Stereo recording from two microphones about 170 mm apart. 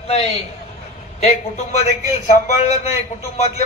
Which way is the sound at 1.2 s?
40° left (ahead or behind).